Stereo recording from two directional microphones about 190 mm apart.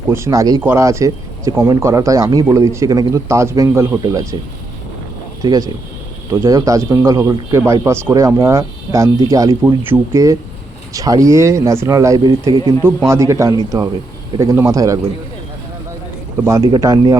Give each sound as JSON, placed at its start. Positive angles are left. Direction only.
{"t": 0.1, "sound": "speech", "side_deg": -15}
{"t": 5.4, "sound": "speech", "side_deg": -20}
{"t": 16.4, "sound": "speech", "side_deg": -15}